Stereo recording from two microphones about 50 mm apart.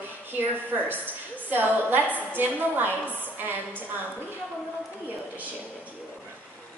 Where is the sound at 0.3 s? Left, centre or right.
Right.